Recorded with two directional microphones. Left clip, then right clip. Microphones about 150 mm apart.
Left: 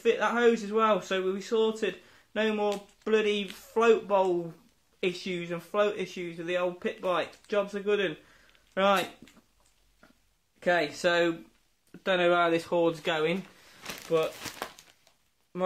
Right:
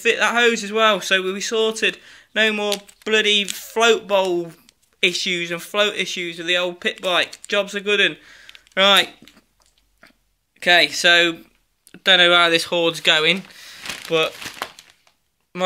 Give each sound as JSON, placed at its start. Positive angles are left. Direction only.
{"t": 0.0, "sound": "speech", "side_deg": -10}
{"t": 10.6, "sound": "speech", "side_deg": 5}
{"t": 12.0, "sound": "speech", "side_deg": 0}
{"t": 13.0, "sound": "speech", "side_deg": -10}